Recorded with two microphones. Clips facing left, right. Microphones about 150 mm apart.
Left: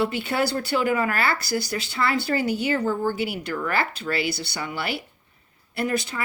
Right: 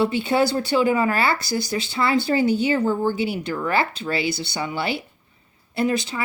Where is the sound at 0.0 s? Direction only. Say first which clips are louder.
Right 4 dB; 25° right (ahead or behind).